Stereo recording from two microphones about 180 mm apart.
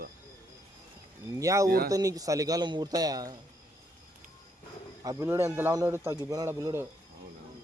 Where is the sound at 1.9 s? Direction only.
20° right (ahead or behind).